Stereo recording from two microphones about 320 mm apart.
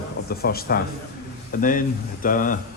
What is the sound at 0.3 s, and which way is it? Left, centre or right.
Speech, left.